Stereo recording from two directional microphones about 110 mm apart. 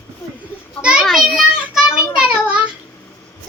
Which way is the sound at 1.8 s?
25° left (ahead or behind).